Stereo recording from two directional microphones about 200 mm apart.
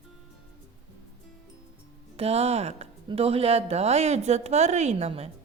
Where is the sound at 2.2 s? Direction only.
30° right (ahead or behind).